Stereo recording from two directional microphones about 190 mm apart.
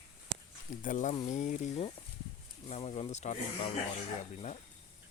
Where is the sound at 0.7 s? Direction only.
45° left (ahead or behind).